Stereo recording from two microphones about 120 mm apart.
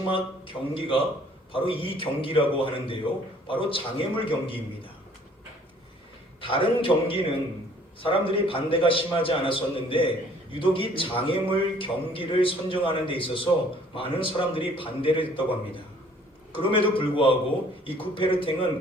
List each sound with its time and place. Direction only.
0.1 s a man's voice: 50° left (ahead or behind)
6.4 s a man's voice: 45° left (ahead or behind)